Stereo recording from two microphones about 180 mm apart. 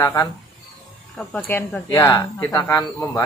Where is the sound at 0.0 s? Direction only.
20° left (ahead or behind).